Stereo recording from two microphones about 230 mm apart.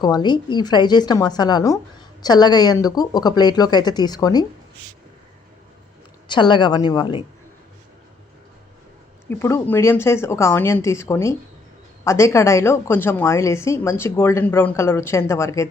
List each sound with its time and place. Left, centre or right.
0.0 s a woman's voice: centre
6.2 s a woman's voice: centre
9.3 s a woman's voice: centre